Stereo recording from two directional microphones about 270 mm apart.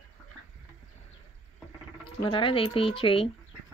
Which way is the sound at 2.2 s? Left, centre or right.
Centre.